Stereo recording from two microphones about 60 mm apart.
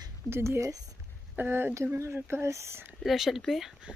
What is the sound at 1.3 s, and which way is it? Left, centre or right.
Speech, right.